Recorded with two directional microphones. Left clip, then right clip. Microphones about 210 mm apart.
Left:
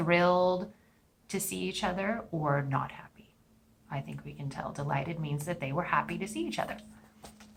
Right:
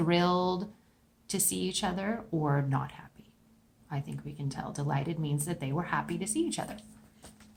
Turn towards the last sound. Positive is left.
turn(degrees=-40)  # may be behind; listen again after turning